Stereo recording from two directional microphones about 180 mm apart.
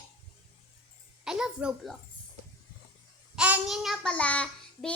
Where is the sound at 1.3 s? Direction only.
5° right (ahead or behind).